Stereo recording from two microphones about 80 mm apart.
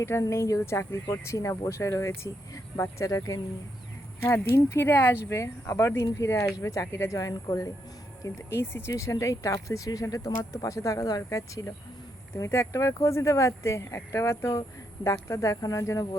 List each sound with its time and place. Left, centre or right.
0.0 s speech: left